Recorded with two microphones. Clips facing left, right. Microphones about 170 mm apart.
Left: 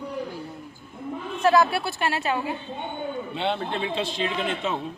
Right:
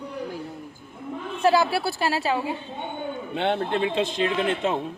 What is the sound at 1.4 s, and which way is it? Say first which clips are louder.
A woman's voice: even; 30° right (ahead or behind).